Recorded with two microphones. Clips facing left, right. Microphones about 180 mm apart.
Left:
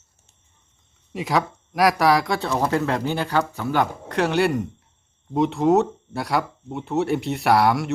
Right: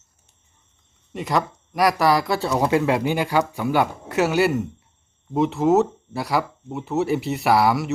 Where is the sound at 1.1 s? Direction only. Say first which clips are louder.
Even; centre (ahead or behind).